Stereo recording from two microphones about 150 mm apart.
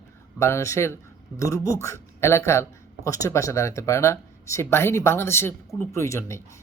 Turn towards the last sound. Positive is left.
turn(degrees=20)  # may be behind; listen again after turning